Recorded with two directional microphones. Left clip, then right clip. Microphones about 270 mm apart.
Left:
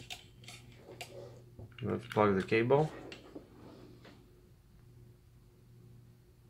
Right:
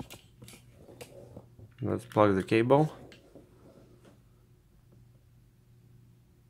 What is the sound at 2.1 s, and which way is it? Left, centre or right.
Speech, right.